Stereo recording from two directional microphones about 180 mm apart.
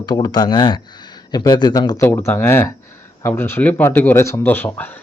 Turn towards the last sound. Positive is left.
turn(degrees=10)  # may be behind; listen again after turning